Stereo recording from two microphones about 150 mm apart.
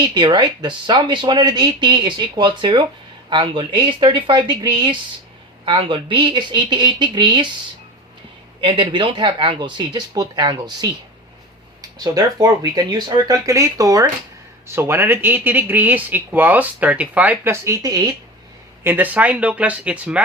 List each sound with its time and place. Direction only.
0.0 s speech: 30° right (ahead or behind)
8.6 s speech: 35° right (ahead or behind)
18.8 s speech: 15° right (ahead or behind)